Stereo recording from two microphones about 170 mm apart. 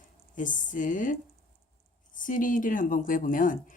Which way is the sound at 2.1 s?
50° left (ahead or behind).